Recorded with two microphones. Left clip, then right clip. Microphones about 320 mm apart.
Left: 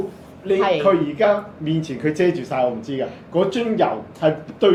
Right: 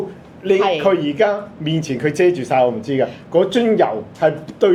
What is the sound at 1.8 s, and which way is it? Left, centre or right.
Speech, right.